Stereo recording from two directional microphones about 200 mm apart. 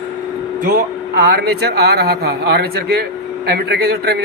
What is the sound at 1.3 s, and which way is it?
A man's voice, 50° right (ahead or behind).